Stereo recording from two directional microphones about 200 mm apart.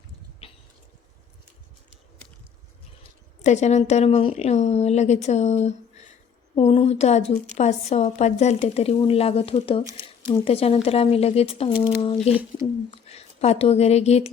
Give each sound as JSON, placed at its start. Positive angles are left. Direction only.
{"t": 0.4, "sound": "a sound", "side_deg": 30}
{"t": 3.0, "sound": "a woman's voice", "side_deg": 35}
{"t": 12.3, "sound": "speech", "side_deg": -10}
{"t": 12.9, "sound": "speech", "side_deg": 30}